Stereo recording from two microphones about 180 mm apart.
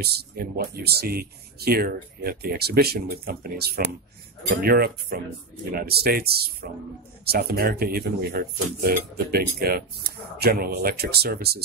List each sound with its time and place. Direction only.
0.0 s speech: 60° right (ahead or behind)